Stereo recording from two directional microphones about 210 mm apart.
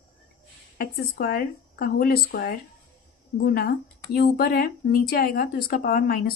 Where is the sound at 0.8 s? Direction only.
45° left (ahead or behind).